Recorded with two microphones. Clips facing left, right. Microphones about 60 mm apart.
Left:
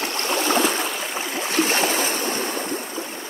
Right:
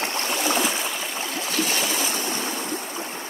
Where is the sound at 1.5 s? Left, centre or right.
Left.